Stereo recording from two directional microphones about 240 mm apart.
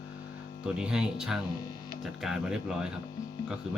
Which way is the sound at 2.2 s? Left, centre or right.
Centre.